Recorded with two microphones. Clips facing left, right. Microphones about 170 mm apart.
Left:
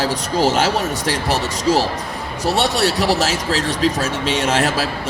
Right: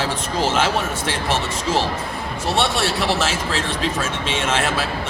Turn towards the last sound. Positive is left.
turn(degrees=40)  # may be behind; listen again after turning